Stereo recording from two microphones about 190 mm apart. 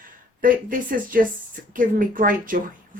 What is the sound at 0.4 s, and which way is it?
A woman's voice, 45° right (ahead or behind).